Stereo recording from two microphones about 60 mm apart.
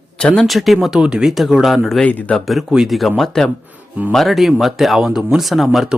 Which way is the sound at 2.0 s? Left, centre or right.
Left.